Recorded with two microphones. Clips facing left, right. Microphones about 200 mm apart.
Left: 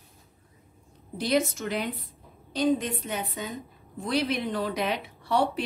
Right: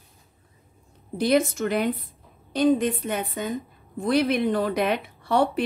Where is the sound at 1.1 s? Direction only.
55° right (ahead or behind).